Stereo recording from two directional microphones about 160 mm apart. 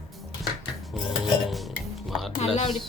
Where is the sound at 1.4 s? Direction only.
Centre (ahead or behind).